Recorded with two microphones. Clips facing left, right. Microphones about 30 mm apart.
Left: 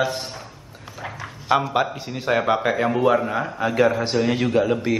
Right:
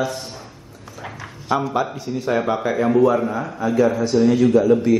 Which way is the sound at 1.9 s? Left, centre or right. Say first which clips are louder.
Right 1 dB; left.